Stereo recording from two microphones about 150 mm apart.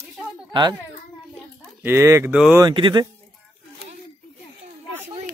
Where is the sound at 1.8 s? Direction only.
15° right (ahead or behind).